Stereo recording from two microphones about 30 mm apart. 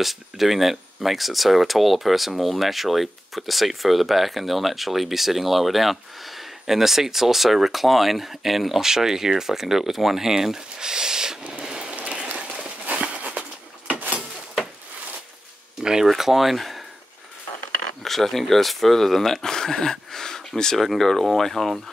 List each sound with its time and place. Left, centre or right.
0.0 s speech: centre; by 11.3 s right
11.6 s a sound: centre
13.1 s a sound: right
15.8 s speech: right
16.1 s speech: centre
18.0 s speech: centre
20.7 s speech: centre
21.0 s speech: centre